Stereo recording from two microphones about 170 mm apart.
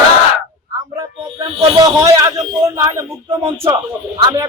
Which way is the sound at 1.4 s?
25° right (ahead or behind).